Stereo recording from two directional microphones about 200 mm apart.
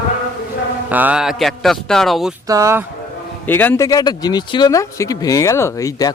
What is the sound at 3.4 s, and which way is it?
A man's voice, 10° left (ahead or behind).